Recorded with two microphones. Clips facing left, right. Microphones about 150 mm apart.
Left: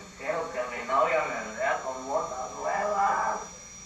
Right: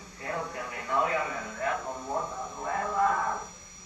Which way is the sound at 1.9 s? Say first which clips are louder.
Left 3 dB; 10° left (ahead or behind).